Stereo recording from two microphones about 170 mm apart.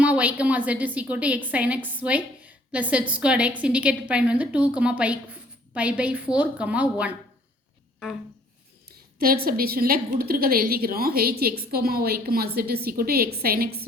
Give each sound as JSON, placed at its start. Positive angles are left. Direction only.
{"t": 0.0, "sound": "a woman's voice", "side_deg": -10}
{"t": 8.9, "sound": "a woman's voice", "side_deg": -65}